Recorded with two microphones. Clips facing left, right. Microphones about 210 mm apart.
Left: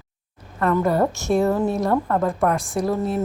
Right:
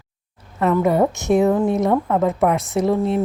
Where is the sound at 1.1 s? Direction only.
15° right (ahead or behind).